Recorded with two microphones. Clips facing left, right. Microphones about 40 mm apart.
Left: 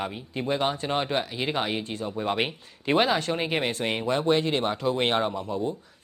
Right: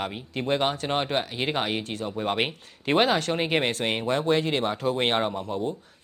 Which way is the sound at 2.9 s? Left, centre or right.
Right.